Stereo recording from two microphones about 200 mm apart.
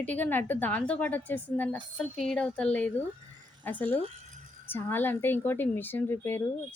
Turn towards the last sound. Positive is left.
turn(degrees=10)  # may be behind; listen again after turning